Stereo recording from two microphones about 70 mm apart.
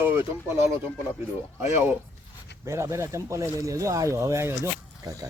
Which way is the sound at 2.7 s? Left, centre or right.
Right.